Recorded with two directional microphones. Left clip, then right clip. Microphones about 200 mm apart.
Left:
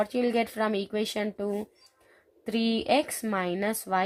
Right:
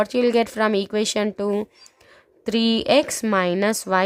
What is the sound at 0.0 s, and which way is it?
A woman's voice, 35° right (ahead or behind).